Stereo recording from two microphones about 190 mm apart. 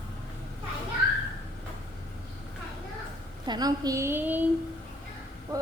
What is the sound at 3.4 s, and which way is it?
A woman's voice, 20° right (ahead or behind).